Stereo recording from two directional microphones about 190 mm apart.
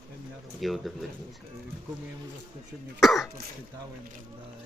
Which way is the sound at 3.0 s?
Centre (ahead or behind).